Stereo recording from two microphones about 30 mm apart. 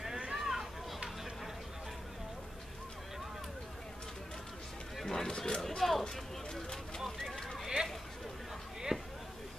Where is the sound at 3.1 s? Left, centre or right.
Centre.